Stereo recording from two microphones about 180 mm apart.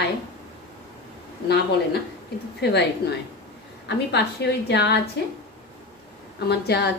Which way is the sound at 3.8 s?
70° left (ahead or behind).